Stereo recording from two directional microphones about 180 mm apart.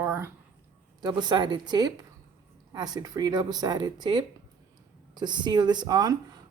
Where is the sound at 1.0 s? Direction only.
25° right (ahead or behind).